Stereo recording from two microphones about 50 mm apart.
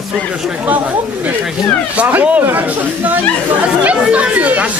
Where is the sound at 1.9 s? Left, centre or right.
Right.